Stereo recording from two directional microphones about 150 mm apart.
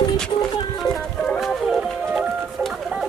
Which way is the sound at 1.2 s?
Centre (ahead or behind).